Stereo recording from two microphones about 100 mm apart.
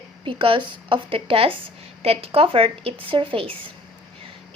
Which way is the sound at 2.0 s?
80° right.